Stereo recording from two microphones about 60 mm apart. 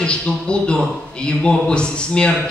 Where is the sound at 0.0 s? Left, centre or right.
Centre.